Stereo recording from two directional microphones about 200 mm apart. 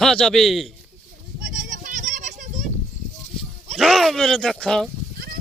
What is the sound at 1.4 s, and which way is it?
Goat, 45° right (ahead or behind).